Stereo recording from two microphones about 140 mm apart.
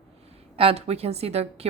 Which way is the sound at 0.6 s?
45° right (ahead or behind).